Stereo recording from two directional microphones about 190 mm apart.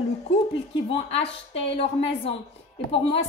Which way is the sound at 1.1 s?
30° left (ahead or behind).